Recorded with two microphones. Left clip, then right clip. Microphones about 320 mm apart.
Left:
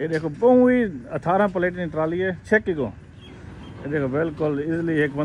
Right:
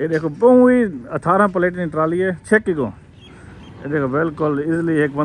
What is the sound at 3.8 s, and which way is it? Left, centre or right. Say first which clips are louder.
Speech: right 4 dB; right.